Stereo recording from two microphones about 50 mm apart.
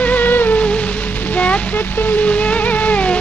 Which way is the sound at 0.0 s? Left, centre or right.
Left.